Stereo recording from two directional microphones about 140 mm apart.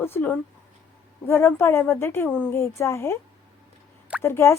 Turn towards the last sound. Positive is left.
turn(degrees=20)  # may be behind; listen again after turning